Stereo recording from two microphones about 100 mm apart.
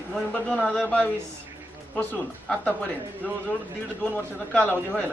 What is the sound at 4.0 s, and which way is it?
Speech, 15° left (ahead or behind).